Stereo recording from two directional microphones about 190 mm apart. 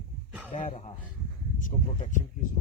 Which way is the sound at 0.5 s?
40° left (ahead or behind).